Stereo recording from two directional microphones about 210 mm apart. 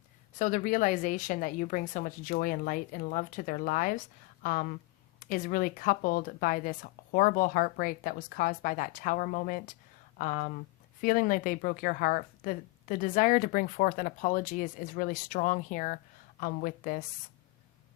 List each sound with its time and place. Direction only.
0.3 s speech: 40° left (ahead or behind)
5.2 s speech: 40° left (ahead or behind)